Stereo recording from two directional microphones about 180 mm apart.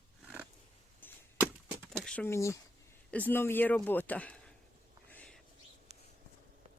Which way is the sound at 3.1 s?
10° left (ahead or behind).